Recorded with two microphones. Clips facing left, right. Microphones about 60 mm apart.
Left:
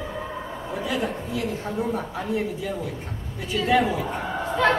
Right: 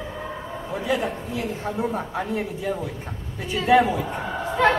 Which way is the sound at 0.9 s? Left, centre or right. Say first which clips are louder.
Right 3 dB; centre.